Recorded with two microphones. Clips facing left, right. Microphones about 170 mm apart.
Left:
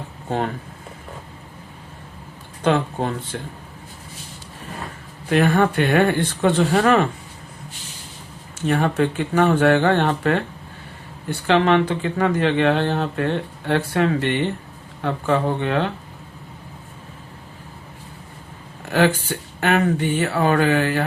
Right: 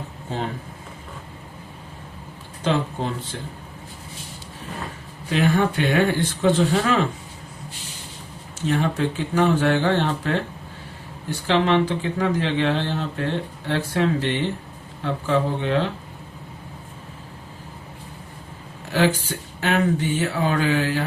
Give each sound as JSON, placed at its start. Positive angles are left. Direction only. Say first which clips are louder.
{"t": 5.3, "sound": "speech", "louder": "left 3 dB", "side_deg": 55}
{"t": 8.6, "sound": "speech", "louder": "left 3 dB", "side_deg": 55}
{"t": 18.9, "sound": "speech", "louder": "left 2 dB", "side_deg": 55}